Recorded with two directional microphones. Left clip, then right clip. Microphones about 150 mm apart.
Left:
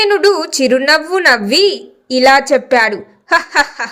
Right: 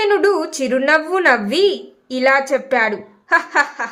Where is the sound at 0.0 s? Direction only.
30° left (ahead or behind).